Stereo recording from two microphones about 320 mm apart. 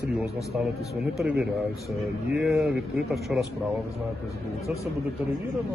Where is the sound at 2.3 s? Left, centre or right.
Centre.